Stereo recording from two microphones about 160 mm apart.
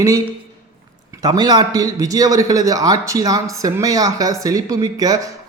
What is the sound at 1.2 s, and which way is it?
A man's voice, 25° right (ahead or behind).